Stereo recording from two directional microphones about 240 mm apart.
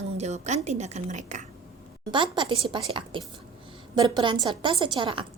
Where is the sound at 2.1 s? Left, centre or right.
Centre.